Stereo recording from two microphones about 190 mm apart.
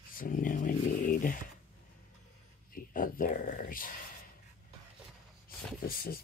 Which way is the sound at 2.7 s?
50° left (ahead or behind).